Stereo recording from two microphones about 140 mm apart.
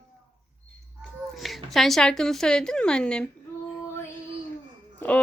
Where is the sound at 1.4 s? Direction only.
Centre (ahead or behind).